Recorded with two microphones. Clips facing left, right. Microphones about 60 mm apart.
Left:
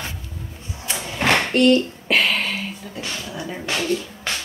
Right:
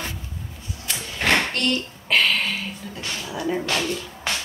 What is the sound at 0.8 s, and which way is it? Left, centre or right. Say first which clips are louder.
Drawer open or close: left 2 dB; centre.